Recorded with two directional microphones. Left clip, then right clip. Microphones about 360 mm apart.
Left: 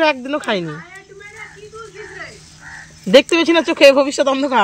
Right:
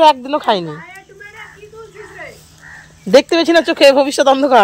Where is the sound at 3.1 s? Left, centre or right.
Centre.